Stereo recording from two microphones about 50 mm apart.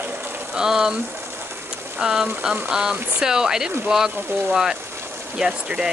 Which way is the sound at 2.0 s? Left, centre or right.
Centre.